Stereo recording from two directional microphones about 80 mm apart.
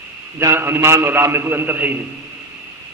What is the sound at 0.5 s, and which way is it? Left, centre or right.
A man's voice, right.